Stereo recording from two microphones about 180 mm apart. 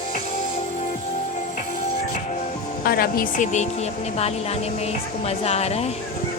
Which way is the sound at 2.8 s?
55° left (ahead or behind).